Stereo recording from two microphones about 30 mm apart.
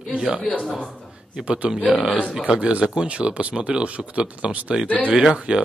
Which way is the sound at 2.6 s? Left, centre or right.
Right.